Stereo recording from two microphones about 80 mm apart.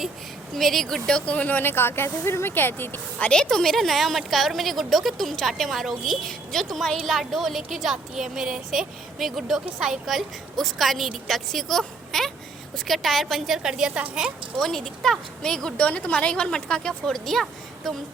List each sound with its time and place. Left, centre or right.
0.5 s speech: centre; by 3.2 s left
3.2 s a woman's voice: centre
14.6 s a woman's voice: centre